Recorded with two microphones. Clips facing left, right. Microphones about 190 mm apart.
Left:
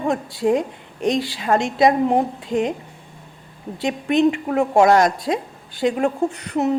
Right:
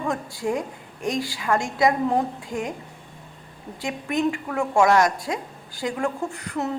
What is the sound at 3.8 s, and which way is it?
A woman's voice, 20° left (ahead or behind).